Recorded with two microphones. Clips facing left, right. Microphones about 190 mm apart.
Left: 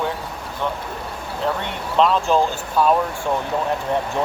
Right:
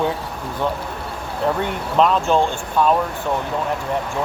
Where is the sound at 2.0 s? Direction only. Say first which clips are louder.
Right 1 dB; centre (ahead or behind).